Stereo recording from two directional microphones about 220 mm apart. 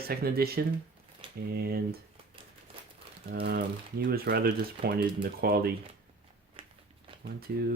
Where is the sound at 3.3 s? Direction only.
45° right (ahead or behind).